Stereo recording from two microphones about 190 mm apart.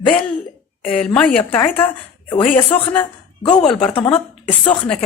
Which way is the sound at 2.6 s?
30° left (ahead or behind).